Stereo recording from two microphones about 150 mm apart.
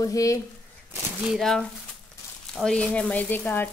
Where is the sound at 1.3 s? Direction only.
5° left (ahead or behind).